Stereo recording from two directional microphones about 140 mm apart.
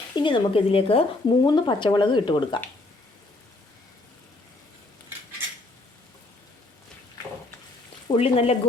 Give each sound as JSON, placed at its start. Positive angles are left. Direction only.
{"t": 0.2, "sound": "speech", "side_deg": 35}
{"t": 1.4, "sound": "speech", "side_deg": 30}
{"t": 8.0, "sound": "speech", "side_deg": 40}